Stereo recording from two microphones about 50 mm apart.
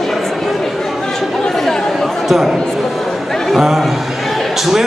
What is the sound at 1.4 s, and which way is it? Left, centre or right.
Chatter, centre.